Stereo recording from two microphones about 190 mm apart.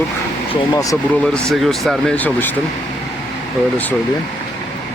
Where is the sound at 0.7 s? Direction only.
15° left (ahead or behind).